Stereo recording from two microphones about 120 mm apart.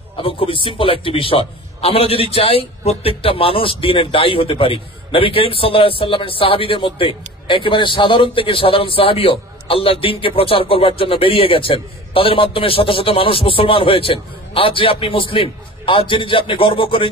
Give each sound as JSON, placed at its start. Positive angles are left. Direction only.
{"t": 0.2, "sound": "a man's voice", "side_deg": 50}